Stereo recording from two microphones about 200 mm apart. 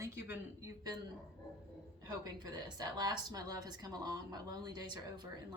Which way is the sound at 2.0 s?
20° right (ahead or behind).